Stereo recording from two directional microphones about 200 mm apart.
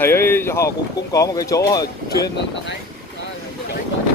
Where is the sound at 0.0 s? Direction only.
10° left (ahead or behind).